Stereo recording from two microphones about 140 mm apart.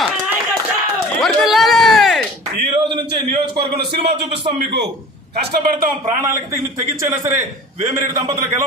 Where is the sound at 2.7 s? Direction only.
35° right (ahead or behind).